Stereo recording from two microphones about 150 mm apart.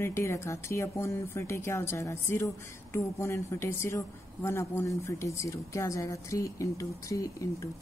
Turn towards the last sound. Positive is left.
turn(degrees=20)  # may be behind; listen again after turning